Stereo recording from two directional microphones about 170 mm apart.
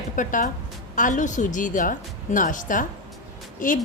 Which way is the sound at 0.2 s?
50° left (ahead or behind).